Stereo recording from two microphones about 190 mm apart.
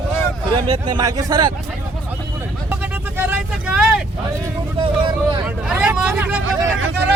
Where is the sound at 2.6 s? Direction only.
10° right (ahead or behind).